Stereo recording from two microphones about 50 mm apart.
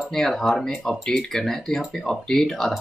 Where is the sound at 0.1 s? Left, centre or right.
Centre.